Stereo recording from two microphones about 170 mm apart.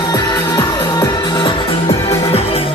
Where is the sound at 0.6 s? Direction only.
25° left (ahead or behind).